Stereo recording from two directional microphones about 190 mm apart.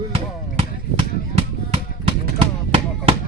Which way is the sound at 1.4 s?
35° right (ahead or behind).